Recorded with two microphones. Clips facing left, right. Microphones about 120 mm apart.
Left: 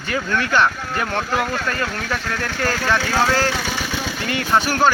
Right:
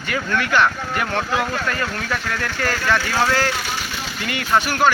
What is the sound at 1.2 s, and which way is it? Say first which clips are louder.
Speech: left 1 dB; centre (ahead or behind).